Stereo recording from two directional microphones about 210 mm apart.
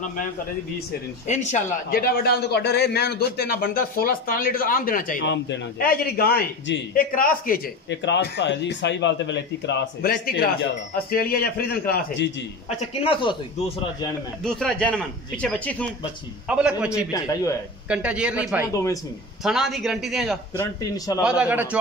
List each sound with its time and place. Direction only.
1.2 s a man's voice: 35° left (ahead or behind)
5.2 s a man's voice: 55° left (ahead or behind)
12.6 s speech: 25° left (ahead or behind)
14.4 s a man's voice: 5° left (ahead or behind)
17.1 s a man's voice: 15° left (ahead or behind)
17.8 s a man's voice: 5° right (ahead or behind)
18.7 s a man's voice: 15° left (ahead or behind)
19.4 s a man's voice: centre (ahead or behind)
20.5 s a man's voice: 15° left (ahead or behind)
21.2 s a man's voice: 5° right (ahead or behind)